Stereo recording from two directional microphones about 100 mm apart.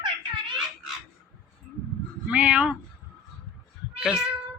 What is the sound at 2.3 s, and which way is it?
Speech, 10° right (ahead or behind).